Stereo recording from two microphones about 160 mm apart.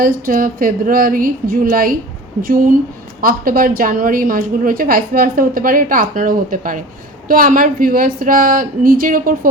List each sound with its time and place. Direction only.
0.0 s a woman's voice: 60° right (ahead or behind)